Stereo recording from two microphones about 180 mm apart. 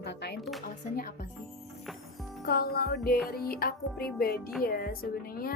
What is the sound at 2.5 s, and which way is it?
Speech, 60° left (ahead or behind).